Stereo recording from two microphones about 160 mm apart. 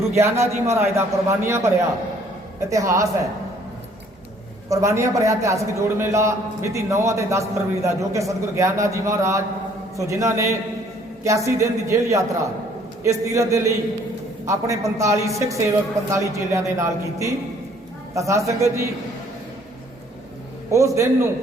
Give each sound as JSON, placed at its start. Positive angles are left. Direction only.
{"t": 0.2, "sound": "a man's voice", "side_deg": -15}
{"t": 4.7, "sound": "a man's voice", "side_deg": -20}
{"t": 20.7, "sound": "a man's voice", "side_deg": -20}